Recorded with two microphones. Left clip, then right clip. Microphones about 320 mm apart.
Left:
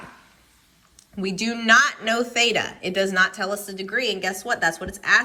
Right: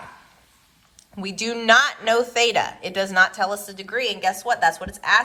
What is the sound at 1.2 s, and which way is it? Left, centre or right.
Speech, centre.